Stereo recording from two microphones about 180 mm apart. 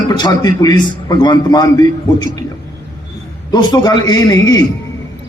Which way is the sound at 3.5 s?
20° left (ahead or behind).